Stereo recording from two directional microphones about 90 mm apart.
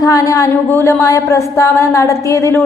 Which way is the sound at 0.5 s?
25° left (ahead or behind).